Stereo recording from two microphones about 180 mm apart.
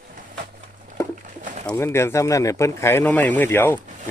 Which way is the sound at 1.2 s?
45° right (ahead or behind).